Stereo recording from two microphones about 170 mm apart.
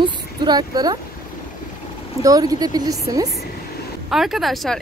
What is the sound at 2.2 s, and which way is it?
A woman's voice, 20° right (ahead or behind).